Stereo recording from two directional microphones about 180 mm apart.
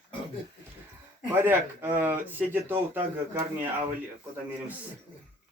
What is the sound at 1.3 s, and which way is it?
Speech, 10° right (ahead or behind).